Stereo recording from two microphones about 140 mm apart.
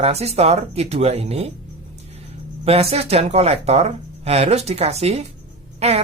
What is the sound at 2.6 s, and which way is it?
Speech, 45° right (ahead or behind).